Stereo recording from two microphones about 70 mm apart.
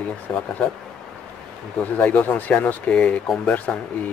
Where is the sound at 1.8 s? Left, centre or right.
Left.